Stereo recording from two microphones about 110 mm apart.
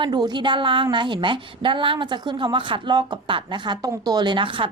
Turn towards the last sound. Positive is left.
turn(degrees=-50)  # may be behind; listen again after turning